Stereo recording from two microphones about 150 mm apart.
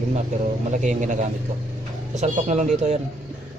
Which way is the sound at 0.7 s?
55° right (ahead or behind).